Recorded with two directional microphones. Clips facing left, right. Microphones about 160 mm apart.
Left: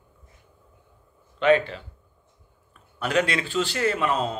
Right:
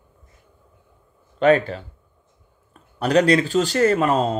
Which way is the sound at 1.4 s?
40° right (ahead or behind).